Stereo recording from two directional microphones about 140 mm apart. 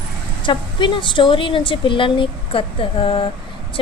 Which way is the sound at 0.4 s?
35° left (ahead or behind).